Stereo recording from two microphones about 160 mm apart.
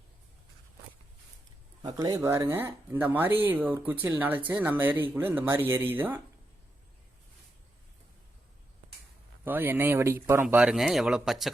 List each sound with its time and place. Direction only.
1.8 s speech: 20° right (ahead or behind)
9.4 s speech: 10° right (ahead or behind)